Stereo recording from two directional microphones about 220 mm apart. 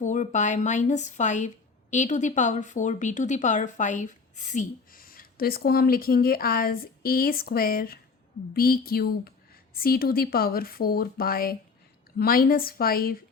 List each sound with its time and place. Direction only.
0.0 s speech: 35° left (ahead or behind)